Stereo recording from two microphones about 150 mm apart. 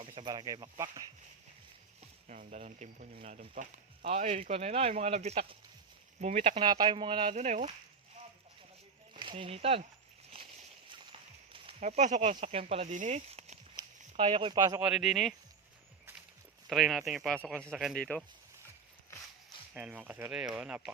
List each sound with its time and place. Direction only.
0.2 s speech: 30° right (ahead or behind)
2.2 s speech: 55° right (ahead or behind)
6.6 s speech: 30° right (ahead or behind)
7.3 s speech: 50° right (ahead or behind)
9.1 s speech: 35° right (ahead or behind)
10.3 s a sound: 35° right (ahead or behind)
11.8 s speech: 50° right (ahead or behind); by 14.8 s 30° right (ahead or behind)
14.8 s speech: 5° right (ahead or behind)
16.6 s speech: centre (ahead or behind)
19.7 s speech: 10° right (ahead or behind)